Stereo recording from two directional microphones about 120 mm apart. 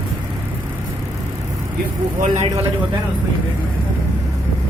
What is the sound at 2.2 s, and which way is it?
Speech, 80° right.